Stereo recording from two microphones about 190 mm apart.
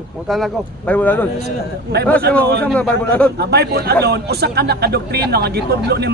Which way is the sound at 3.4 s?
60° right (ahead or behind).